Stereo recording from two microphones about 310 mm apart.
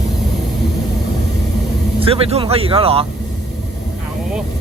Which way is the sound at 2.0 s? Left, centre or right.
Centre.